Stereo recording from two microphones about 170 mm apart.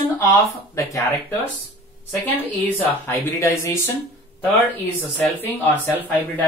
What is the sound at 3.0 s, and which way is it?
Speech, 15° left (ahead or behind).